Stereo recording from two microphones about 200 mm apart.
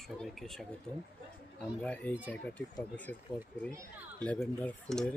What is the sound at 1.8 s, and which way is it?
Speech, 5° left (ahead or behind).